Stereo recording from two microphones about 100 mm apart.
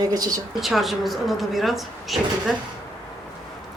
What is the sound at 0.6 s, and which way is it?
Speech, centre (ahead or behind).